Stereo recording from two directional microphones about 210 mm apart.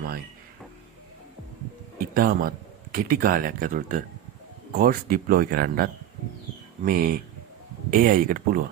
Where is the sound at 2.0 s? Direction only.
45° right (ahead or behind).